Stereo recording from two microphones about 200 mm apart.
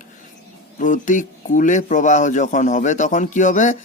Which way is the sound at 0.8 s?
40° left (ahead or behind).